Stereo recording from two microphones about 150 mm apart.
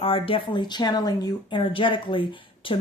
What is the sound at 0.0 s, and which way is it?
Speech, 35° left (ahead or behind).